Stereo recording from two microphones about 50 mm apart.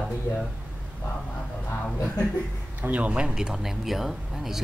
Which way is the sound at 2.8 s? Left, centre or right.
Right.